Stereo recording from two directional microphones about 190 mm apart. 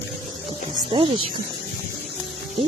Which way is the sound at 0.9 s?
25° right (ahead or behind).